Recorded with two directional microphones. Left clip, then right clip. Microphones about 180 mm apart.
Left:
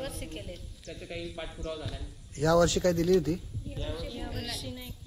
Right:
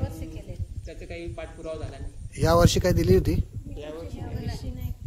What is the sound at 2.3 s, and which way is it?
Speech, 35° right (ahead or behind).